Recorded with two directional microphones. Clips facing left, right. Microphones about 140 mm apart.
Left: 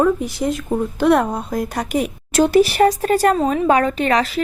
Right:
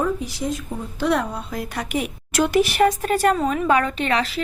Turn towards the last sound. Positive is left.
turn(degrees=40)  # may be behind; listen again after turning